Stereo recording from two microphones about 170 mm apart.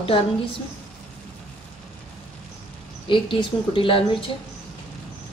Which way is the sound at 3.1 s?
30° left (ahead or behind).